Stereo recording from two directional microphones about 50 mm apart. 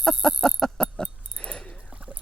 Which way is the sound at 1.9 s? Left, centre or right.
Right.